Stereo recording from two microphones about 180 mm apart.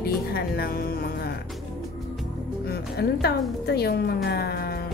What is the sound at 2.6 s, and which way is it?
A woman's voice, 60° left (ahead or behind).